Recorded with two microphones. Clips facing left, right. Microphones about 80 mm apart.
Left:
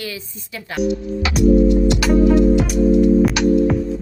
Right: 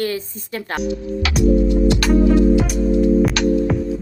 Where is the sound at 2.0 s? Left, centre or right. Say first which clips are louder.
Left 1 dB; centre.